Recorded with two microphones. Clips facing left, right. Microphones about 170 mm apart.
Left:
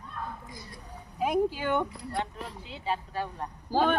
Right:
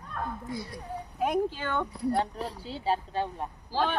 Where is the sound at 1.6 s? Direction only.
15° left (ahead or behind).